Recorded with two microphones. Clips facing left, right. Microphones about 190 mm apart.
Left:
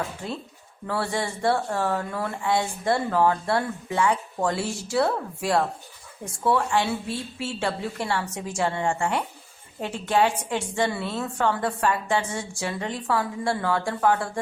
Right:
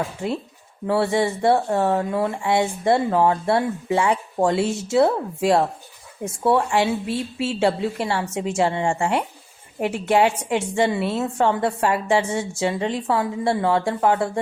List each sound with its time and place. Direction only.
0.9 s speech: 25° right (ahead or behind)